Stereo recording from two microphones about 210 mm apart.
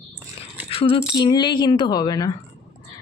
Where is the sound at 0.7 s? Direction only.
25° left (ahead or behind).